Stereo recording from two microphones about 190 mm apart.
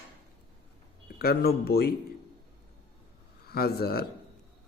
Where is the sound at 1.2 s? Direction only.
55° left (ahead or behind).